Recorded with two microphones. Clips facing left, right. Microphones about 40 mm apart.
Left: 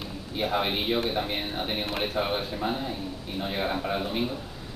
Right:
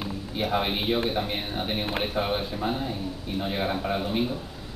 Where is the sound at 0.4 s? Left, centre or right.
Centre.